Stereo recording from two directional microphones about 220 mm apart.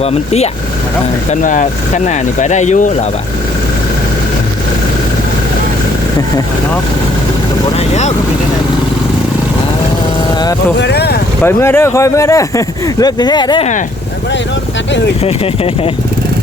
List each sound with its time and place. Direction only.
0.0 s speech: 30° left (ahead or behind)
10.8 s speech: 50° left (ahead or behind)
11.4 s speech: 10° left (ahead or behind)
15.2 s speech: 25° left (ahead or behind)